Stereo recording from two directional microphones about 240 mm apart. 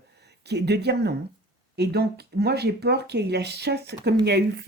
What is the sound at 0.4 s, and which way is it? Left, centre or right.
Speech, right.